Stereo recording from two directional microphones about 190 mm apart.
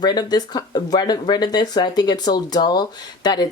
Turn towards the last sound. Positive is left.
turn(degrees=20)  # may be behind; listen again after turning